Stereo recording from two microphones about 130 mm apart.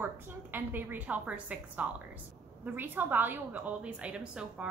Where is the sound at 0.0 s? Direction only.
15° right (ahead or behind).